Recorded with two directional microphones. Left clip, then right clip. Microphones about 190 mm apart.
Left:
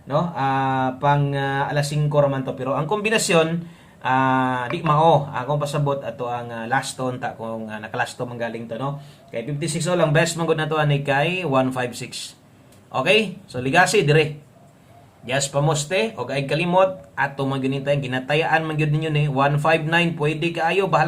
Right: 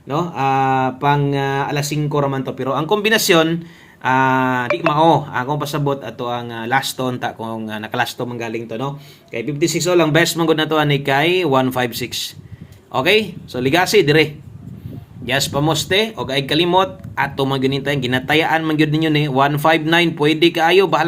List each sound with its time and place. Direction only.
0.1 s speech: 45° right (ahead or behind)
4.9 s speech: 35° right (ahead or behind)
15.3 s speech: 25° right (ahead or behind)